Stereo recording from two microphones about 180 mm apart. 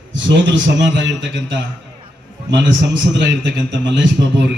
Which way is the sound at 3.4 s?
80° right.